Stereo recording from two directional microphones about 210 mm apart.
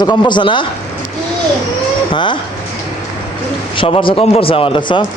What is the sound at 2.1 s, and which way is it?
Speech, 25° left (ahead or behind).